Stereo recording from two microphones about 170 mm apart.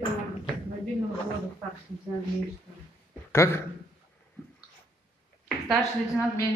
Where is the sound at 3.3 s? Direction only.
15° left (ahead or behind).